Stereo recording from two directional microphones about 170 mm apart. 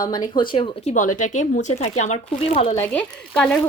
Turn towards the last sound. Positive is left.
turn(degrees=10)  # may be behind; listen again after turning